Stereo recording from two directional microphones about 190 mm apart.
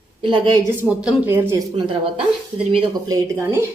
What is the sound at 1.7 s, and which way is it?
A woman's voice, 25° right (ahead or behind).